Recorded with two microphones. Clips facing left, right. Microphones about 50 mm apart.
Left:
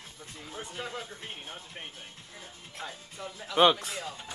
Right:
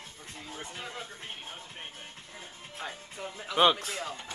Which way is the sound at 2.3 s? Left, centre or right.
Right.